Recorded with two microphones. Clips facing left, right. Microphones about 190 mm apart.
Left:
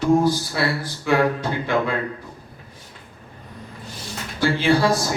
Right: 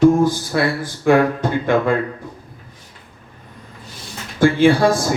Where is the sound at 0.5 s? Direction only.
50° right (ahead or behind).